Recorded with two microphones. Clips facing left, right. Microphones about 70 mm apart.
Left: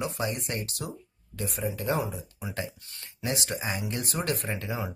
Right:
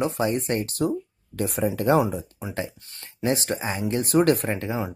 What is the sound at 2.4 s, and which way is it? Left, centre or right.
Speech, right.